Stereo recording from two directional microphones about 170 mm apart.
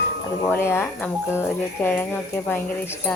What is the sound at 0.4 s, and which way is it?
Speech, 10° left (ahead or behind).